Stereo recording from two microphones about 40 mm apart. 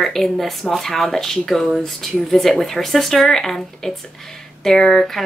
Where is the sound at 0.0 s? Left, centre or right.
Centre.